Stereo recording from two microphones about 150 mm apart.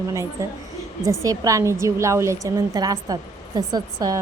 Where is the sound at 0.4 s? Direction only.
20° right (ahead or behind).